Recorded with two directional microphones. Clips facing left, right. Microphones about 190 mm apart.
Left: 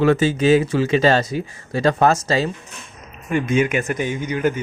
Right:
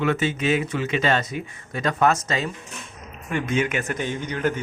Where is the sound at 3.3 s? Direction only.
15° left (ahead or behind).